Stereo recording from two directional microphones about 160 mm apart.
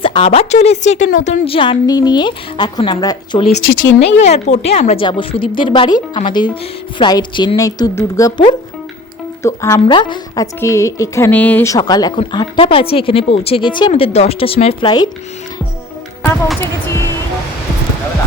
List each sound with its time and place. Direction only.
0.0 s a woman's voice: 35° left (ahead or behind)
4.0 s a woman's voice: 45° left (ahead or behind); by 9.8 s 15° left (ahead or behind)
9.8 s a woman's voice: 30° left (ahead or behind)